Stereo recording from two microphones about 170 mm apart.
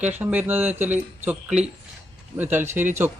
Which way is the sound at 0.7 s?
45° right (ahead or behind).